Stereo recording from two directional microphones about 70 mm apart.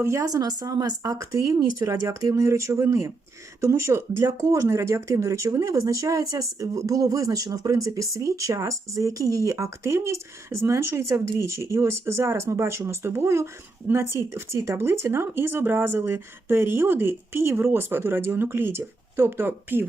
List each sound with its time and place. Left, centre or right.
0.0 s speech: right
0.3 s speech: right